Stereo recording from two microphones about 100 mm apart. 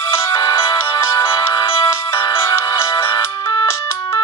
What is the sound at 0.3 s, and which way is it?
Music, 30° left (ahead or behind).